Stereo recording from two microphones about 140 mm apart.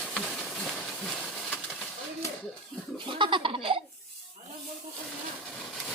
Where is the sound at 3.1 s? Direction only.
35° right (ahead or behind).